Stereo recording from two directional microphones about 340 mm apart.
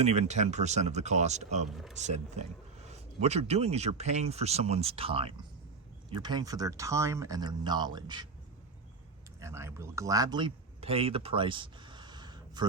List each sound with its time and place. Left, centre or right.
0.0 s speech: centre
9.4 s speech: centre